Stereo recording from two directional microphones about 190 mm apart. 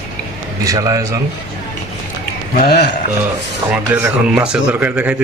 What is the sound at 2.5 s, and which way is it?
Speech, 55° left (ahead or behind).